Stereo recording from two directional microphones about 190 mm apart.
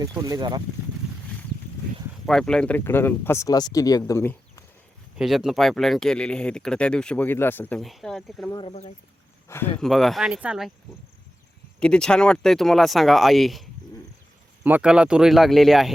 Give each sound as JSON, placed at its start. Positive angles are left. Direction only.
{"t": 0.0, "sound": "speech", "side_deg": -20}
{"t": 2.2, "sound": "speech", "side_deg": 5}
{"t": 5.1, "sound": "speech", "side_deg": -5}
{"t": 8.4, "sound": "speech", "side_deg": 25}
{"t": 9.5, "sound": "speech", "side_deg": 10}
{"t": 9.8, "sound": "speech", "side_deg": 0}
{"t": 11.8, "sound": "speech", "side_deg": 5}